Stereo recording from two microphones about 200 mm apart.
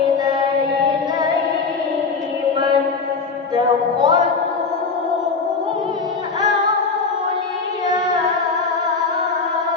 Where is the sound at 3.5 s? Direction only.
20° right (ahead or behind).